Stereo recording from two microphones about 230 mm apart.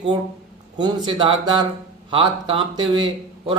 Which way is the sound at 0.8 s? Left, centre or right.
Centre.